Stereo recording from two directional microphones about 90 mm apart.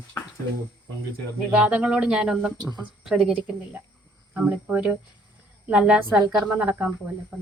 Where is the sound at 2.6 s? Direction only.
50° right (ahead or behind).